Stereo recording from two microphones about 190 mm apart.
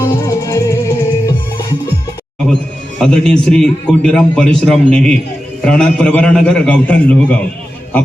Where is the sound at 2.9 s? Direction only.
5° left (ahead or behind).